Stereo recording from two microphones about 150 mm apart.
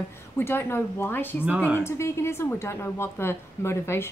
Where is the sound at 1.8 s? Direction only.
15° left (ahead or behind).